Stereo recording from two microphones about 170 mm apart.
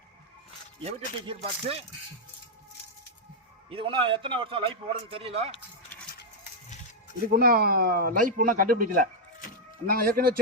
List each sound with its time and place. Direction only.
0.9 s a man's voice: 35° right (ahead or behind)
3.7 s a man's voice: 30° right (ahead or behind)
7.3 s speech: 60° right (ahead or behind)